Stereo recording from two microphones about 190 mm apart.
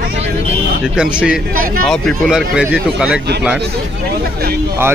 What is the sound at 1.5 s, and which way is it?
Speech, 50° right (ahead or behind).